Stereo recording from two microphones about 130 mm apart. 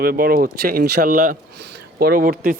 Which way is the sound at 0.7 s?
90° right.